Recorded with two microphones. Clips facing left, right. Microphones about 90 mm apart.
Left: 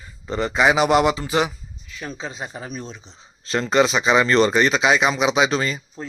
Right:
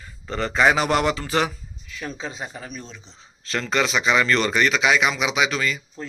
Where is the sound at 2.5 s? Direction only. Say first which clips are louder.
Left 4 dB; 20° left (ahead or behind).